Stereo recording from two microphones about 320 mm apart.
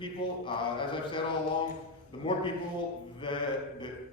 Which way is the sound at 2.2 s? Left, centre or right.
Centre.